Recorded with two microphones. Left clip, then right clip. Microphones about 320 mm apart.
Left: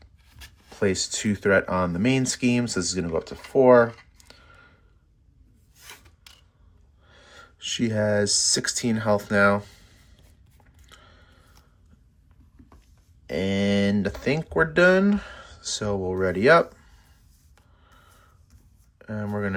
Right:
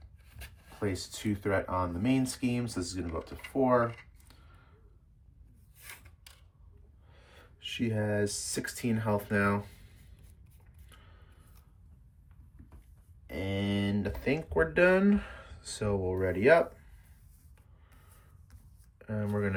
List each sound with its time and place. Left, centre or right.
0.8 s speech: left
7.1 s speech: centre
13.2 s speech: centre
18.9 s speech: centre